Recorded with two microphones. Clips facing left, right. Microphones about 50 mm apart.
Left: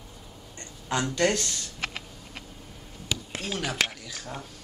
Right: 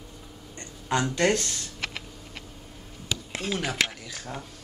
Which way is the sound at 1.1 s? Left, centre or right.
Right.